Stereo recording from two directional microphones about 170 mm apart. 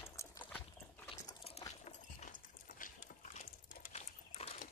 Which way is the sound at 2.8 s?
55° left (ahead or behind).